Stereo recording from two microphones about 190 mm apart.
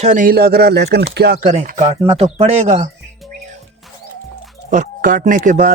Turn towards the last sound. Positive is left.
turn(degrees=-45)  # may be behind; listen again after turning